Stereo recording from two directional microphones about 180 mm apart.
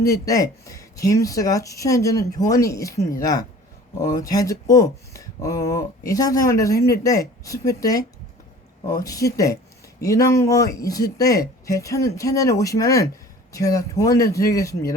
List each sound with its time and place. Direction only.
0.0 s speech: 20° left (ahead or behind)
9.0 s speech: 20° left (ahead or behind)